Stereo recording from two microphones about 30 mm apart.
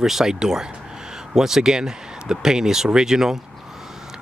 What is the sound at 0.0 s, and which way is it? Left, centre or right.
Speech, centre.